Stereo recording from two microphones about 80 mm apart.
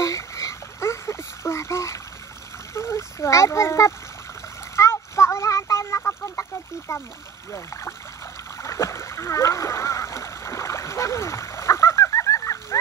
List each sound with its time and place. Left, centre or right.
0.0 s a sound: left
7.5 s speech: left
8.5 s splash: left